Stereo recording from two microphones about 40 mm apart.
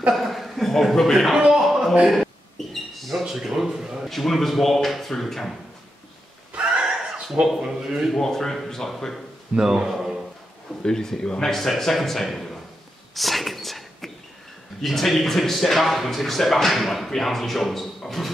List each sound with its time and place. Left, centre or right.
0.1 s speech: centre
1.3 s a sound: centre
4.1 s speech: centre
7.6 s a man's voice: right
8.1 s speech: centre
9.6 s a man's voice: centre
10.8 s speech: centre
11.5 s speech: centre
13.1 s a sound: centre
14.8 s speech: centre